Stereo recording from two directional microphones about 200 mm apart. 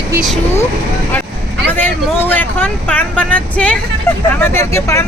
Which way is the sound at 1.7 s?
10° left (ahead or behind).